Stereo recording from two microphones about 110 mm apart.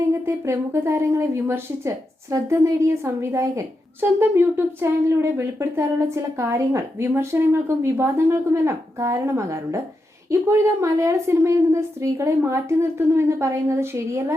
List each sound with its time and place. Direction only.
0.3 s speech: 25° right (ahead or behind)